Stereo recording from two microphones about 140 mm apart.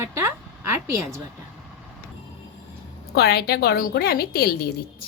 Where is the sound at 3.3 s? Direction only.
90° left.